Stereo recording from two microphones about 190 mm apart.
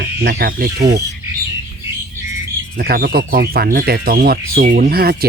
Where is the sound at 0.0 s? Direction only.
55° right (ahead or behind).